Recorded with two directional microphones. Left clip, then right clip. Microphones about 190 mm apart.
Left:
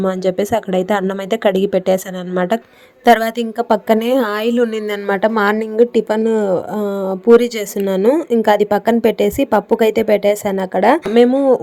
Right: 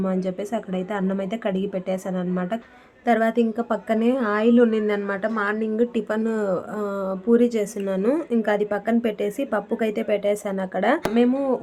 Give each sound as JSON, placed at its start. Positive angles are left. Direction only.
{"t": 0.0, "sound": "a woman's voice", "side_deg": 40}